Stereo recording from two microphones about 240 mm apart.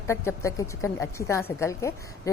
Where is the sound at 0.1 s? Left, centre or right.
Centre.